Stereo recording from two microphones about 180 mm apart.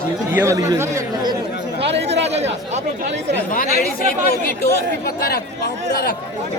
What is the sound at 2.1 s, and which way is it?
Chatter, 75° right (ahead or behind).